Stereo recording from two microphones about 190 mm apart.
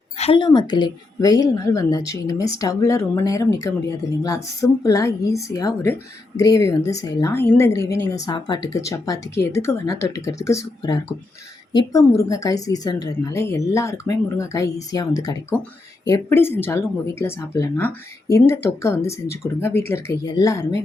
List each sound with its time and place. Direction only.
0.2 s a woman's voice: 25° left (ahead or behind)